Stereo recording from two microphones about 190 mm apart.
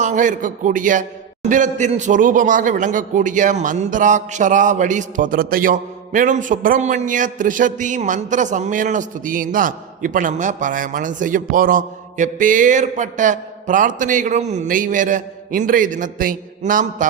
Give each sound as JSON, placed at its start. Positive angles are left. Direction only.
{"t": 0.0, "sound": "a man's voice", "side_deg": -40}